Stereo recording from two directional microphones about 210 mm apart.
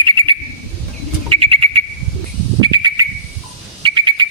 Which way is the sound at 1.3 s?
25° right (ahead or behind).